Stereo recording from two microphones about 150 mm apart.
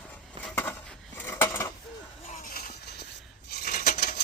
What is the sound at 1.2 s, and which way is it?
Cutlery, 15° left (ahead or behind).